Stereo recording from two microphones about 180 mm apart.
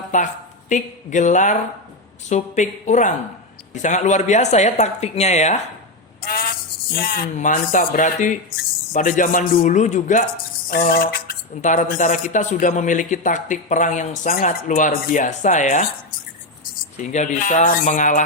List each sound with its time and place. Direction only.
0.1 s speech: 40° left (ahead or behind)
6.9 s speech: 55° left (ahead or behind)
10.7 s a sound: 50° left (ahead or behind)
11.9 s speech: 45° left (ahead or behind)
17.0 s speech: 40° left (ahead or behind)